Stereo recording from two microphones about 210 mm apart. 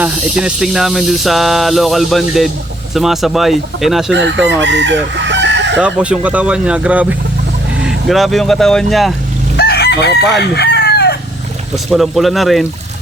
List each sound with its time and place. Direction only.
0.0 s hiss: 5° right (ahead or behind)
4.1 s chicken: 55° right (ahead or behind)
5.8 s hiss: 5° right (ahead or behind)
9.6 s chicken: 50° left (ahead or behind)
11.9 s hiss: centre (ahead or behind)